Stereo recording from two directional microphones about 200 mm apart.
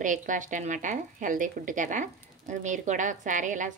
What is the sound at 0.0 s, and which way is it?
Speech, 40° right (ahead or behind).